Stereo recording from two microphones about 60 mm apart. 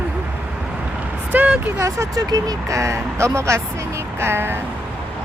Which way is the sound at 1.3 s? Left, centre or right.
Right.